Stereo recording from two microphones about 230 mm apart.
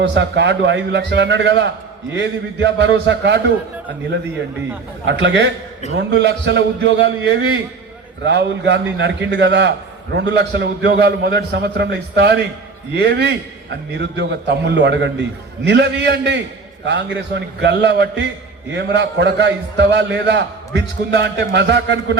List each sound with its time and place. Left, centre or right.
0.0 s a man's voice: right
5.0 s a man's voice: right